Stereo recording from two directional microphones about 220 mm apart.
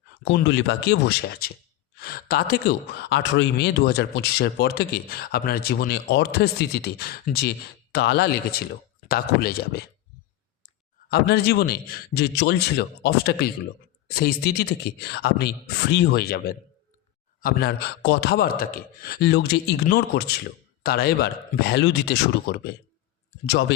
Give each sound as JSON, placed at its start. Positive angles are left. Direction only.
{"t": 0.3, "sound": "speech", "side_deg": 55}
{"t": 11.1, "sound": "speech", "side_deg": 45}